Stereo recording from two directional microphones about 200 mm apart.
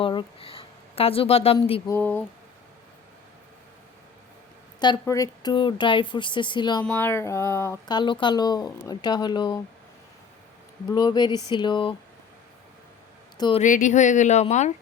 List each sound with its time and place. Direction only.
0.0 s speech: 25° left (ahead or behind)
1.9 s speech: 10° left (ahead or behind)
4.8 s speech: 20° left (ahead or behind)
6.8 s speech: 10° left (ahead or behind)
10.8 s speech: 20° left (ahead or behind)
13.3 s speech: 20° left (ahead or behind)
13.6 s speech: 40° left (ahead or behind)